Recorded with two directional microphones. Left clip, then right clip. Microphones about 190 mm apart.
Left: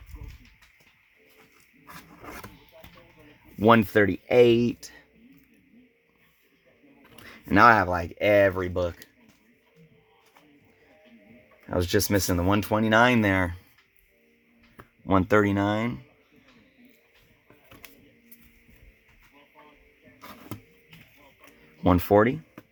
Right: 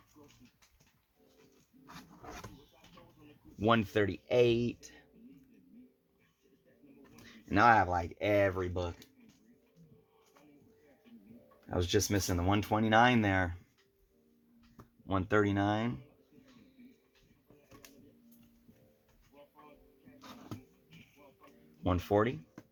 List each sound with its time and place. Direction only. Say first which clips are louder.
3.6 s speech: left 10 dB; 65° left (ahead or behind)
7.3 s speech: left 8 dB; 60° left (ahead or behind); by 8.7 s 40° left (ahead or behind)
8.8 s speech: left 11 dB; 55° left (ahead or behind)
11.7 s speech: left 7 dB; 50° left (ahead or behind)
15.0 s speech: left 9 dB; 60° left (ahead or behind); by 16.0 s 35° left (ahead or behind)
20.1 s vehicle: left 7 dB; 55° left (ahead or behind)
21.8 s speech: left 10 dB; 65° left (ahead or behind)